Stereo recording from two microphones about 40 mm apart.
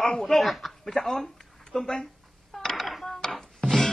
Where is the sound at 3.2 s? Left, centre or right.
Centre.